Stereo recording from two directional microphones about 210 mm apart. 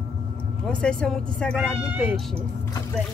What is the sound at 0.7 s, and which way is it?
Speech, 5° left (ahead or behind).